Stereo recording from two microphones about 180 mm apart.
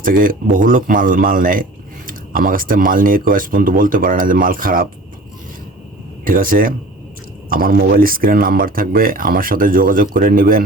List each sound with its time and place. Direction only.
0.0 s speech: 50° right (ahead or behind)
6.2 s speech: 50° right (ahead or behind)